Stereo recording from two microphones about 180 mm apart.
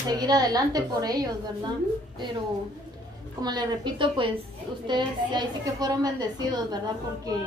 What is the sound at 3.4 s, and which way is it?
A woman's voice, 25° right (ahead or behind).